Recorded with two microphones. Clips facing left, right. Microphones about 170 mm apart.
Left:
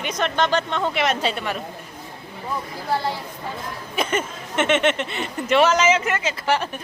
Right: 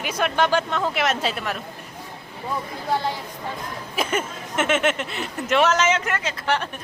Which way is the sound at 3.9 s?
5° right (ahead or behind).